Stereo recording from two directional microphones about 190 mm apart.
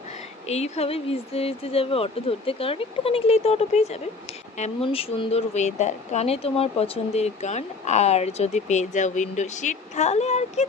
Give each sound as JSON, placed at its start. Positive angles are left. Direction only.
{"t": 0.4, "sound": "speech", "side_deg": 35}